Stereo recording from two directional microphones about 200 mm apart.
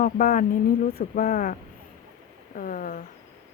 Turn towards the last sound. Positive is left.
turn(degrees=45)  # may be behind; listen again after turning